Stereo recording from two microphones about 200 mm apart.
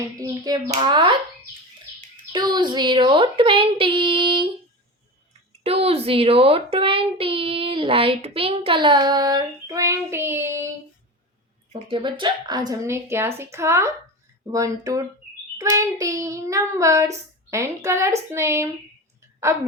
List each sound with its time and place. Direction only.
0.2 s a child's voice: 20° right (ahead or behind)
2.3 s a child's voice: 20° right (ahead or behind)
5.6 s a child's voice: 30° right (ahead or behind); by 10.7 s 15° right (ahead or behind)
11.7 s child singing: 25° right (ahead or behind)